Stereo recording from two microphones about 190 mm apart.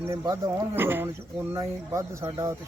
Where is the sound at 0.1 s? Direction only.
15° right (ahead or behind).